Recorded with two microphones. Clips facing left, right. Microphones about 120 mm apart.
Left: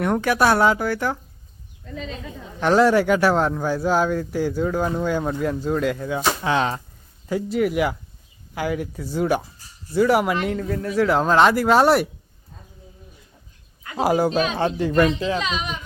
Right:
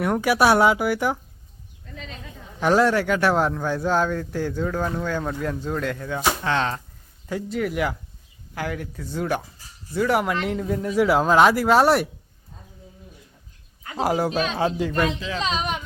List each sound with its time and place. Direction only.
0.0 s speech: 5° right (ahead or behind)
2.6 s speech: centre (ahead or behind)
2.9 s speech: 10° left (ahead or behind)
10.5 s speech: 10° right (ahead or behind)
13.9 s speech: 5° left (ahead or behind)
15.4 s speech: 35° right (ahead or behind)